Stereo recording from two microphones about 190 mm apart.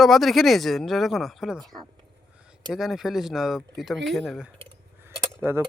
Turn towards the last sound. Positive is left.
turn(degrees=-10)  # may be behind; listen again after turning